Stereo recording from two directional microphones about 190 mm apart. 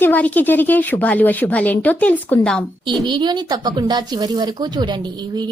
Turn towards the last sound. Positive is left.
turn(degrees=-25)  # may be behind; listen again after turning